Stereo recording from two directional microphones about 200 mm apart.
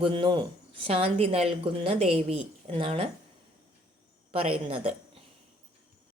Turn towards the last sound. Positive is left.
turn(degrees=-25)  # may be behind; listen again after turning